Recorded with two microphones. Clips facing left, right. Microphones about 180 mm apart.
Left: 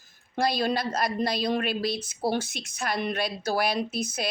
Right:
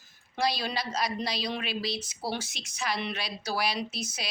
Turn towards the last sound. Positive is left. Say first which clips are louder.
# left 6 dB
turn(degrees=55)  # may be behind; listen again after turning